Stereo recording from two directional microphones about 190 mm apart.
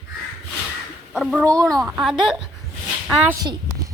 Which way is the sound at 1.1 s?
Centre (ahead or behind).